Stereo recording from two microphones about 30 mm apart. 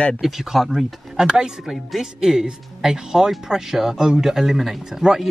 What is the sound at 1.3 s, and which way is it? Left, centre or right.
Speech, right.